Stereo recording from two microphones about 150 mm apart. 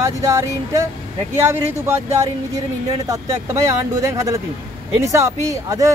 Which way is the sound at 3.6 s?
20° right (ahead or behind).